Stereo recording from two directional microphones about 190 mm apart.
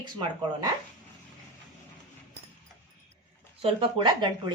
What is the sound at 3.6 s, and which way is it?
Speech, 25° right (ahead or behind).